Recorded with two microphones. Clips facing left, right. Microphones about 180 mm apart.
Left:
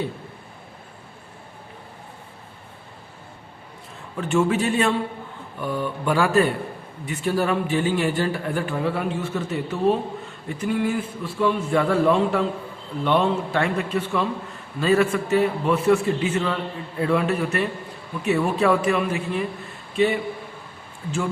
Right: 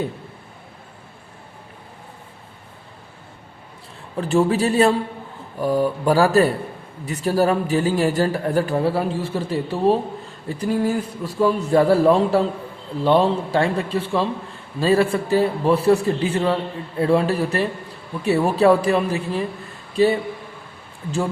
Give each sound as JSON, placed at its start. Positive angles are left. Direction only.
{"t": 4.2, "sound": "a man's voice", "side_deg": -35}